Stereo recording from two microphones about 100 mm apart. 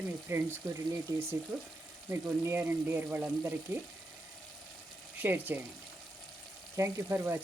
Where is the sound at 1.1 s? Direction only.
35° right (ahead or behind).